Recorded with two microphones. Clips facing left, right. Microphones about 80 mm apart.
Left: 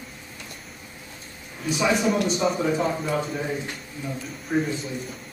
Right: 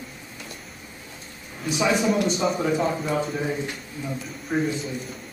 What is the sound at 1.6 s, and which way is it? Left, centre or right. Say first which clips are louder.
A man's voice: even; centre.